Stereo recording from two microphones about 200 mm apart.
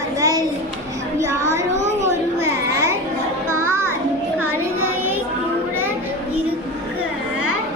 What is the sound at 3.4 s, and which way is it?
Music, 90° left.